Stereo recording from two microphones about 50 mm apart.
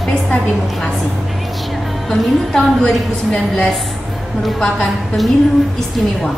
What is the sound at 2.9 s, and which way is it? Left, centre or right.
Speech, left.